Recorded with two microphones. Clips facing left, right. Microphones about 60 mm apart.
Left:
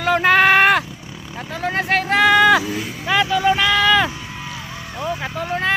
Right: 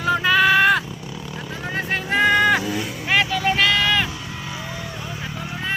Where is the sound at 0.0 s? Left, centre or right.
Left.